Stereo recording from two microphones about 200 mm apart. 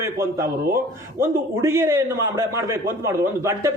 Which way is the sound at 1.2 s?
15° right (ahead or behind).